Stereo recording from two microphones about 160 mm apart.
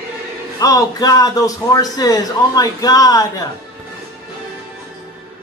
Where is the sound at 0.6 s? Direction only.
20° left (ahead or behind).